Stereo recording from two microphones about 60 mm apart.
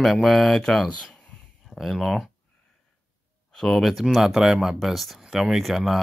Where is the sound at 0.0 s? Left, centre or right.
Centre.